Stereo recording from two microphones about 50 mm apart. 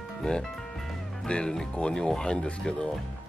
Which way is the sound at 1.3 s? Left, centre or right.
Centre.